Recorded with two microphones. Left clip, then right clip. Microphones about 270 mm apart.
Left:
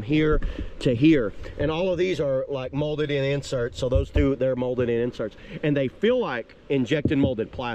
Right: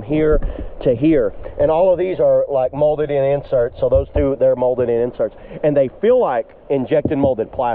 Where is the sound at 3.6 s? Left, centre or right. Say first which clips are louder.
Right 10 dB; left.